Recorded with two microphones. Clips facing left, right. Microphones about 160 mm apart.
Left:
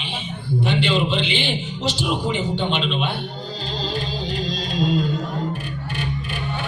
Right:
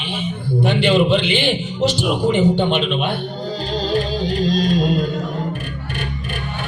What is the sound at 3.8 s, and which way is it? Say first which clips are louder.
Music: right 7 dB; 50° right (ahead or behind).